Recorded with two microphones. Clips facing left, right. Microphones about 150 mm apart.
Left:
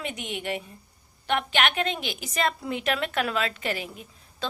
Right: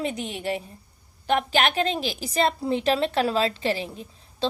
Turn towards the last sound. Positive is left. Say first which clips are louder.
# right 7 dB
turn(degrees=-30)  # may be behind; listen again after turning